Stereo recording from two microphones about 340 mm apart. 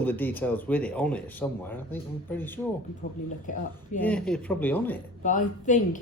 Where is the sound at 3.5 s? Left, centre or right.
Left.